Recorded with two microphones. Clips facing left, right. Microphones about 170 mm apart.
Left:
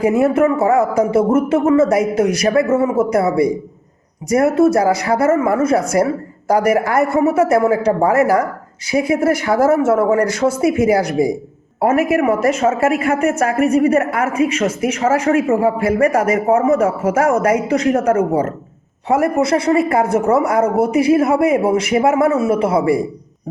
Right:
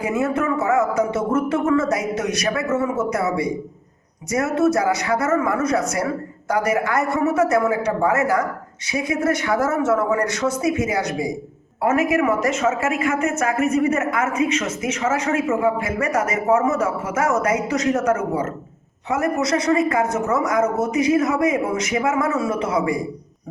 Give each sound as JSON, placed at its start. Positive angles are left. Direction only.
{"t": 0.0, "sound": "speech", "side_deg": 30}